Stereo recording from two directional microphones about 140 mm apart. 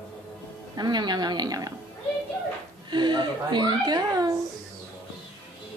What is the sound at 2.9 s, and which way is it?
Speech, 35° right (ahead or behind).